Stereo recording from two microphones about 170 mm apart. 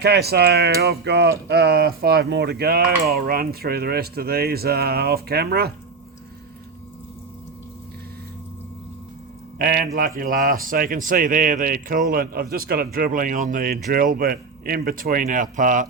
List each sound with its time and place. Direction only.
0.0 s speech: 75° right (ahead or behind)
1.5 s a man's voice: 75° right (ahead or behind)
9.6 s a man's voice: 60° right (ahead or behind)